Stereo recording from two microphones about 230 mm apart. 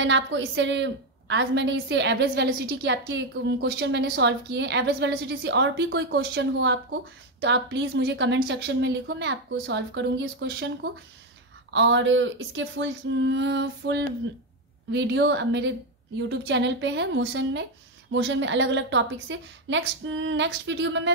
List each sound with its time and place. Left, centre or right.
0.0 s a woman's voice: right